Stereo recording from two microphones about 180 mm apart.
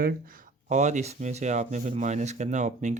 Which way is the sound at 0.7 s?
40° right (ahead or behind).